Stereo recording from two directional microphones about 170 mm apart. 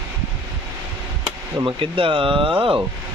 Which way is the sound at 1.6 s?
30° right (ahead or behind).